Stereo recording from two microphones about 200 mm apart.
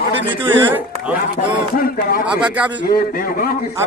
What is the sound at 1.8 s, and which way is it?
Speech, 45° left (ahead or behind).